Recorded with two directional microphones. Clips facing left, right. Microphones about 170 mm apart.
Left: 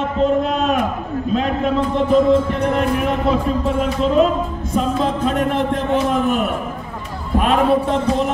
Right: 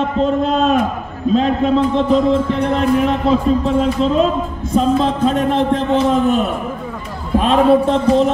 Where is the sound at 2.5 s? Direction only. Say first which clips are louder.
Right 3 dB; 25° right (ahead or behind).